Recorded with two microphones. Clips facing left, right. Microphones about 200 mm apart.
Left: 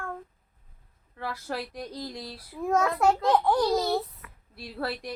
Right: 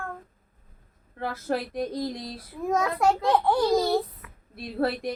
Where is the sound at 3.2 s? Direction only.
10° right (ahead or behind).